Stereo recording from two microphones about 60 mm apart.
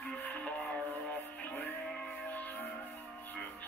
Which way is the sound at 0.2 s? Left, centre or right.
Left.